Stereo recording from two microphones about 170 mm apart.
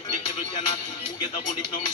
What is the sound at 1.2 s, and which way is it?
Speech, 25° left (ahead or behind).